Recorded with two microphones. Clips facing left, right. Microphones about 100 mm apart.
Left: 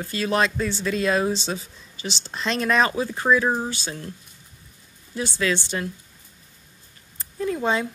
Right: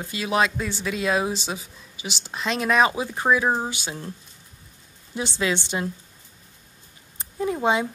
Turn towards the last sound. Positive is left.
turn(degrees=-15)  # may be behind; listen again after turning